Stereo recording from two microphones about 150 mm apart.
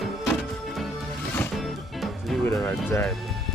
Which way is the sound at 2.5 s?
20° left (ahead or behind).